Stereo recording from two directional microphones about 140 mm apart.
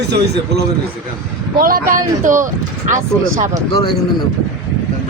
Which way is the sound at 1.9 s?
70° right (ahead or behind).